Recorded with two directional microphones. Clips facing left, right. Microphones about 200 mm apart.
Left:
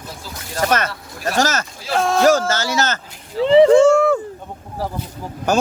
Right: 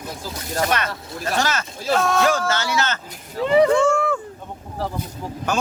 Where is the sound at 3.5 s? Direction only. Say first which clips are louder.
Left 6 dB; 25° left (ahead or behind).